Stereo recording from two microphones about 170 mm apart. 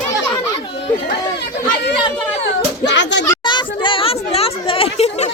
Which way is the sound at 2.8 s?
90° left.